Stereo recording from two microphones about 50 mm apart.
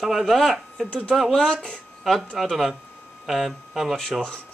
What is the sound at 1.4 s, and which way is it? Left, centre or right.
Speech, centre.